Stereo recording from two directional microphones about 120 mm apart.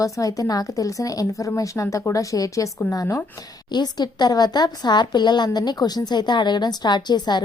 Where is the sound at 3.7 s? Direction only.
35° left (ahead or behind).